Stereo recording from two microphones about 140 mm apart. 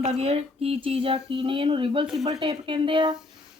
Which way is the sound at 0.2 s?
45° right (ahead or behind).